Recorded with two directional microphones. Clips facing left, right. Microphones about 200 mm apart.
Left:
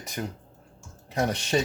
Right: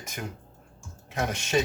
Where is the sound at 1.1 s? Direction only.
35° left (ahead or behind).